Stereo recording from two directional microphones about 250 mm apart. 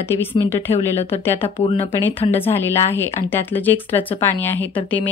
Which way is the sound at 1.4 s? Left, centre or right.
Left.